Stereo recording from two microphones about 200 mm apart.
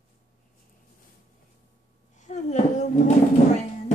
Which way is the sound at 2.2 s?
35° left (ahead or behind).